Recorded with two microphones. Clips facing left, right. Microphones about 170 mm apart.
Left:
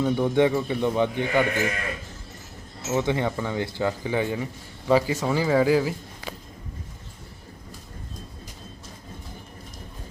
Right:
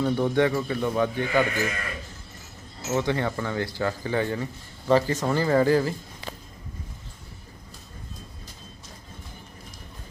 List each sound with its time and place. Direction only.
0.0 s a man's voice: 15° left (ahead or behind)
2.9 s a man's voice: 15° left (ahead or behind)